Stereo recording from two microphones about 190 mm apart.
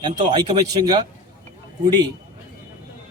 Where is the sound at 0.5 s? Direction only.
20° right (ahead or behind).